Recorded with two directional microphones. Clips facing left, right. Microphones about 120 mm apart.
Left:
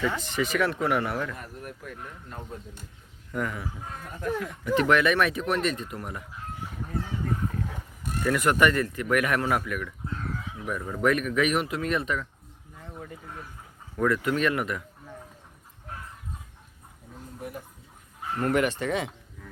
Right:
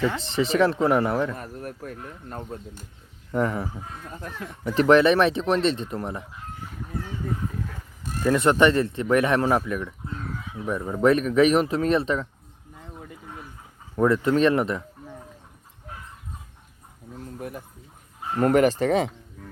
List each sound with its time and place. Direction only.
0.2 s speech: 30° right (ahead or behind)
8.2 s speech: 30° right (ahead or behind)
13.9 s speech: 30° right (ahead or behind)
18.2 s speech: 35° right (ahead or behind)